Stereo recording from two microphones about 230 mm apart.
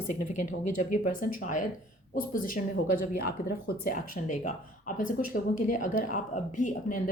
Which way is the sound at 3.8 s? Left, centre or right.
Left.